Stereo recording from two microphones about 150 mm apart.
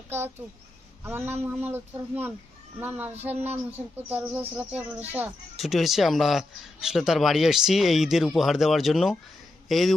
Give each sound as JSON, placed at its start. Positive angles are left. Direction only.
{"t": 0.1, "sound": "speech", "side_deg": -15}
{"t": 5.5, "sound": "a man's voice", "side_deg": 0}